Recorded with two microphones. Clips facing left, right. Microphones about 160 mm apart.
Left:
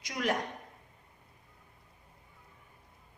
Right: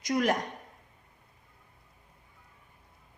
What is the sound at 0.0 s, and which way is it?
Speech, 45° right (ahead or behind).